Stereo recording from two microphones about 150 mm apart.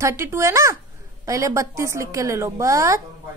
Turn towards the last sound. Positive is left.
turn(degrees=-20)  # may be behind; listen again after turning